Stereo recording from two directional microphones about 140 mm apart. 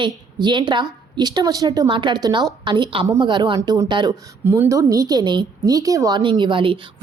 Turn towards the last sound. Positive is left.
turn(degrees=-40)  # may be behind; listen again after turning